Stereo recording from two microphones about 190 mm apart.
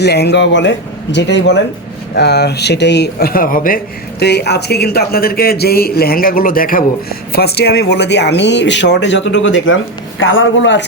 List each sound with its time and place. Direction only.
0.0 s speech: 60° left (ahead or behind)
4.2 s speech: 60° left (ahead or behind); by 9.7 s 80° left
10.2 s a man's voice: 90° left; by 10.8 s 75° left (ahead or behind)